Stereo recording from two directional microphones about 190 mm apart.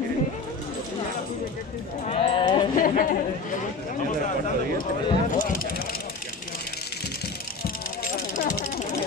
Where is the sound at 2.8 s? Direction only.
45° left (ahead or behind).